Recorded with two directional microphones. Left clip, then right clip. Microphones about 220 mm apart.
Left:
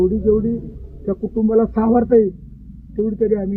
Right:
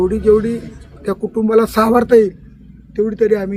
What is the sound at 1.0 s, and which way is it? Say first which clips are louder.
Speech: right 3 dB; 20° right (ahead or behind).